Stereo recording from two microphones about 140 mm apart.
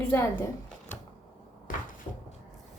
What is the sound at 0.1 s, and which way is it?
Speech, 20° left (ahead or behind).